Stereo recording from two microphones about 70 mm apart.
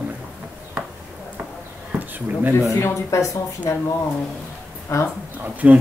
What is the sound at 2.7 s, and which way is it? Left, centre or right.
Speech, left.